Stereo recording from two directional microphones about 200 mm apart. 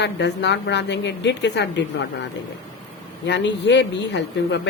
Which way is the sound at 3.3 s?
60° left (ahead or behind).